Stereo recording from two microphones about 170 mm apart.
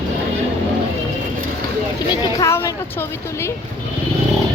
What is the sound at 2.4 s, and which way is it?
Speech, 15° left (ahead or behind).